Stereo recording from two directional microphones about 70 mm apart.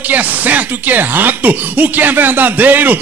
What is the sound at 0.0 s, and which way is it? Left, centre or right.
Speech, right.